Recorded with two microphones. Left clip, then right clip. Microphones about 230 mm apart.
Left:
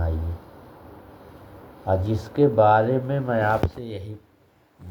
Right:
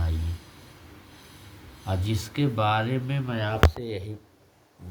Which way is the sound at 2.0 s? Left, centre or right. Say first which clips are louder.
Left 7 dB; centre.